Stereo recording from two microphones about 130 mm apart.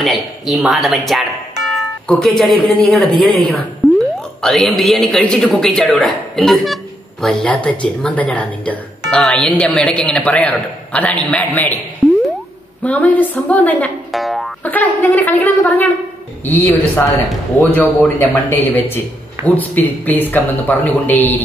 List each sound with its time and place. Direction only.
0.0 s speech: centre (ahead or behind)
3.8 s a sound: centre (ahead or behind)
4.4 s speech: centre (ahead or behind)
12.0 s boing: 5° left (ahead or behind)
12.8 s speech: 10° left (ahead or behind)
14.1 s boing: centre (ahead or behind)
14.6 s speech: 10° left (ahead or behind)